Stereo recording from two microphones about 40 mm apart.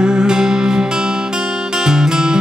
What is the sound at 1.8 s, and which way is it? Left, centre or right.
Music, centre.